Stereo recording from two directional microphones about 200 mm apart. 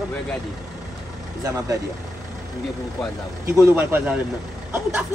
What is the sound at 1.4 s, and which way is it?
Speech, 15° right (ahead or behind).